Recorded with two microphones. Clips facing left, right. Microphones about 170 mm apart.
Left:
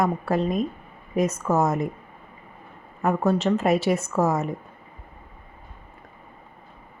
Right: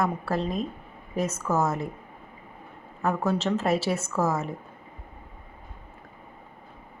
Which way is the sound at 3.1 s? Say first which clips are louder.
Left 5 dB; 15° left (ahead or behind).